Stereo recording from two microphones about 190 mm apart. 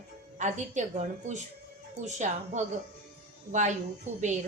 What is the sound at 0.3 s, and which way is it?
A woman's voice, 40° right (ahead or behind).